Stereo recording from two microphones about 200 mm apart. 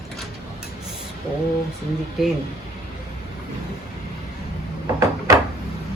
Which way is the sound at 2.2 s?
Centre (ahead or behind).